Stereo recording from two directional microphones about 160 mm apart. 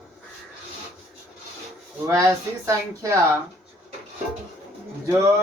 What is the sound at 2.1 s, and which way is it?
A woman's voice, 20° right (ahead or behind).